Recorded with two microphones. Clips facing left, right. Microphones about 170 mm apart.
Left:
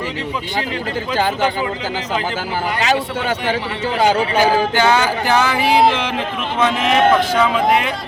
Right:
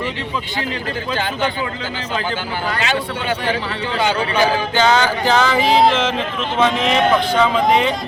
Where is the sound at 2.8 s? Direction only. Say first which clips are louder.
Left 5 dB; 40° left (ahead or behind).